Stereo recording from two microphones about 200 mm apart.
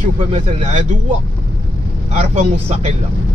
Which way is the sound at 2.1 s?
35° right (ahead or behind).